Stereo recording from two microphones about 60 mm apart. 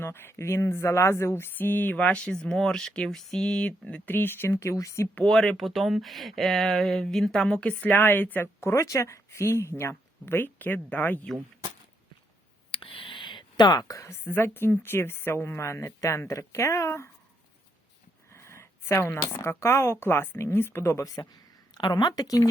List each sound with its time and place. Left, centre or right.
0.0 s speech: left; by 4.0 s centre
4.0 s speech: left
5.3 s speech: centre
5.5 s speech: centre; by 7.9 s left
7.9 s speech: left
8.6 s a woman's voice: left
10.2 s speech: left
13.7 s a woman's voice: left
14.1 s a woman's voice: left
18.3 s a sound: left
19.3 s a woman's voice: left
22.1 s speech: left